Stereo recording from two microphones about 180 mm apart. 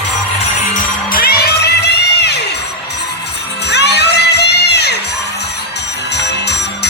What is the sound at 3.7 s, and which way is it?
Music, 70° left (ahead or behind).